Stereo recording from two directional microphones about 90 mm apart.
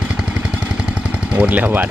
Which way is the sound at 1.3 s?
15° right (ahead or behind).